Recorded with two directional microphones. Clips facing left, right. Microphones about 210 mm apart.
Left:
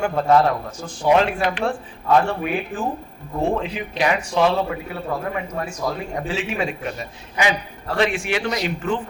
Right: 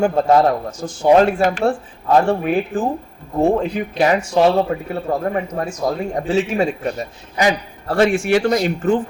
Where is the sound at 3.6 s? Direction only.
45° right (ahead or behind).